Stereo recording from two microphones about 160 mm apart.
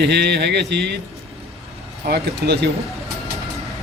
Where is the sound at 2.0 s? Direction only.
85° right.